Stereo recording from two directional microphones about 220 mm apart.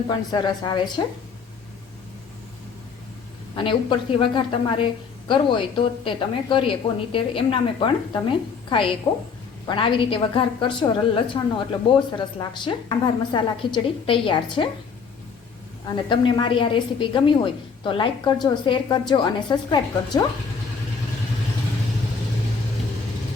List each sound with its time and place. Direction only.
0.1 s a woman's voice: 20° left (ahead or behind)
3.5 s a woman's voice: 20° left (ahead or behind)
15.9 s a woman's voice: 20° left (ahead or behind)